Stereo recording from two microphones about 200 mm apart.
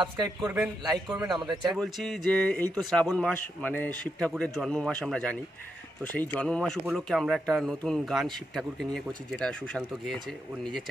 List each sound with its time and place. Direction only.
0.0 s a man's voice: 20° right (ahead or behind)
1.7 s speech: centre (ahead or behind)